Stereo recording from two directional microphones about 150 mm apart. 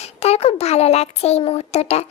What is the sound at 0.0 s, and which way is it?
Speech, 45° left (ahead or behind).